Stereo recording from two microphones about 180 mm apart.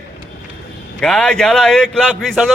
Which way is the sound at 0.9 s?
5° left (ahead or behind).